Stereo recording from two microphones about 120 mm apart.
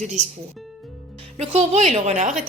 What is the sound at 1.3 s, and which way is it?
A woman's voice, 50° right (ahead or behind).